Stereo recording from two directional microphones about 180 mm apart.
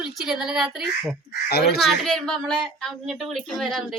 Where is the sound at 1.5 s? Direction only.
65° left (ahead or behind).